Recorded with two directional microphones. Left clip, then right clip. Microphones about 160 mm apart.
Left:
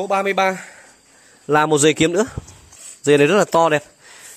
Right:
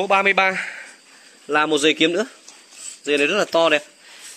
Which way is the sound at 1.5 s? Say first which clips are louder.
Left 3 dB; 55° left (ahead or behind).